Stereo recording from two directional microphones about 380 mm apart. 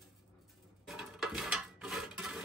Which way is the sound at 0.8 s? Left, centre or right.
Centre.